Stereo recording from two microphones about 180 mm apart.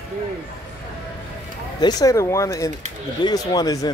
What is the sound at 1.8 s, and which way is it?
A man's voice, 20° left (ahead or behind).